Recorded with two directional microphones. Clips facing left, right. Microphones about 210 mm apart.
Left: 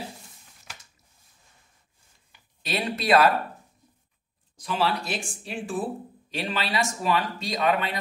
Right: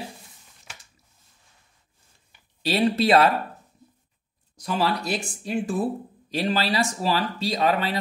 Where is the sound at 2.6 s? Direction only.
30° right (ahead or behind).